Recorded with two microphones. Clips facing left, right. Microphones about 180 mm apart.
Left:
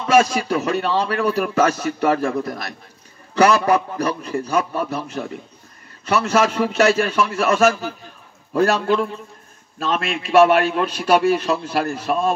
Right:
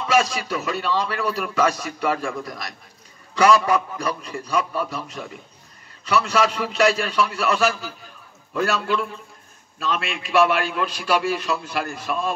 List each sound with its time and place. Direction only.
0.0 s a man's voice: 40° left (ahead or behind)
3.3 s a man's voice: 40° left (ahead or behind)